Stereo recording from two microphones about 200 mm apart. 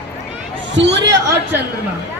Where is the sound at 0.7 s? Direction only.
60° right (ahead or behind).